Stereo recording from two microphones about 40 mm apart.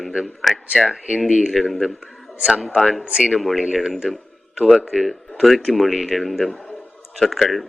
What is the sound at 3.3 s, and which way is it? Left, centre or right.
Speech, centre.